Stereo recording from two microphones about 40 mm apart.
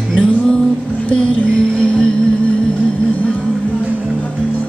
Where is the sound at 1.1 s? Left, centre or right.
Left.